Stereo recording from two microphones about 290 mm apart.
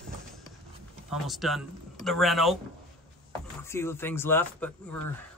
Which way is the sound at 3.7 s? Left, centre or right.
Centre.